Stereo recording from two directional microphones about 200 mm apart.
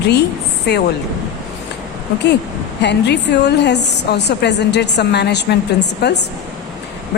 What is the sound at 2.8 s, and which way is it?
A woman's voice, 55° left (ahead or behind).